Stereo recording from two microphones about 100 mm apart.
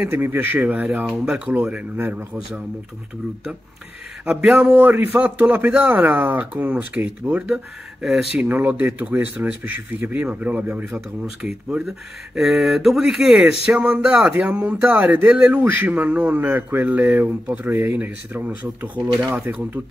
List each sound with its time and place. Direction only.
0.0 s a man's voice: 20° right (ahead or behind)
4.3 s speech: 5° right (ahead or behind)
4.7 s a man's voice: 20° right (ahead or behind); by 8.3 s 5° right (ahead or behind)
8.4 s a man's voice: 15° right (ahead or behind)
11.4 s a man's voice: 5° right (ahead or behind)